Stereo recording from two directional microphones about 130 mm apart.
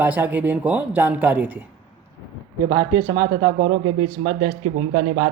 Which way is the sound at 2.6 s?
30° right (ahead or behind).